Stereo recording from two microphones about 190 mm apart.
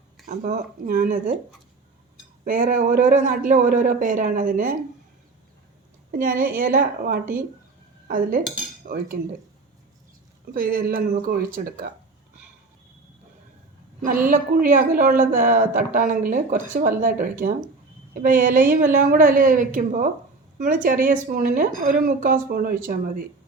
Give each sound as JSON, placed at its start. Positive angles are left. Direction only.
{"t": 0.3, "sound": "a woman's voice", "side_deg": -45}
{"t": 2.4, "sound": "a woman's voice", "side_deg": -45}
{"t": 6.1, "sound": "a woman's voice", "side_deg": -45}
{"t": 8.0, "sound": "cutlery", "side_deg": -45}
{"t": 10.5, "sound": "a woman's voice", "side_deg": -50}
{"t": 14.3, "sound": "a woman's voice", "side_deg": -45}